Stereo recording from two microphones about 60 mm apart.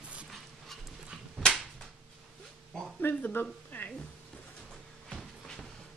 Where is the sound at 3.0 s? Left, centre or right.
Left.